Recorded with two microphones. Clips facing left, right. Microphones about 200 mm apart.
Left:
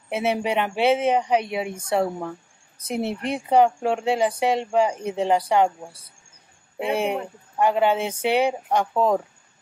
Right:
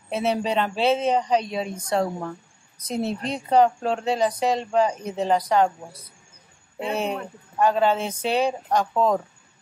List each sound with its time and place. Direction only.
0.1 s speech: 10° left (ahead or behind)
3.3 s speech: 15° left (ahead or behind)